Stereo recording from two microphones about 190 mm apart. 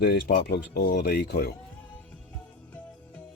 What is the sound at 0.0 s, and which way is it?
Speech, 55° left (ahead or behind).